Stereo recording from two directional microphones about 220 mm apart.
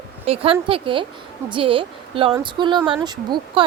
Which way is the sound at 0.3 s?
25° right (ahead or behind).